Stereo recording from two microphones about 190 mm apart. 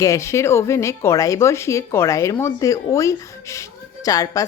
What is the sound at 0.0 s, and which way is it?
Speech, 15° left (ahead or behind).